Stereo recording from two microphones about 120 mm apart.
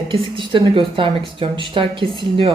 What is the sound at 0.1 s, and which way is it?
A woman's voice, 45° right (ahead or behind).